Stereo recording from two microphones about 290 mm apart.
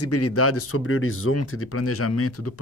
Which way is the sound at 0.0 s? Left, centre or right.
Left.